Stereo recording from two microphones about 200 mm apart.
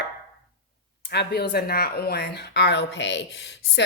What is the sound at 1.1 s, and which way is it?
Speech, 55° left (ahead or behind).